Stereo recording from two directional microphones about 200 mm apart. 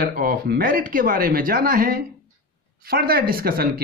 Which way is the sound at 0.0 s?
45° right (ahead or behind).